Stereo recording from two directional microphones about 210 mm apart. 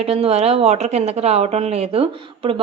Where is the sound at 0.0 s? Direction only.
30° right (ahead or behind).